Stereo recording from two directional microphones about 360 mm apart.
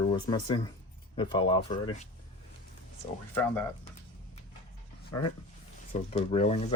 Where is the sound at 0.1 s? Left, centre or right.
Centre.